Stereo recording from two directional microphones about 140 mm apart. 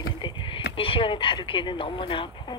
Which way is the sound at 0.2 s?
35° left (ahead or behind).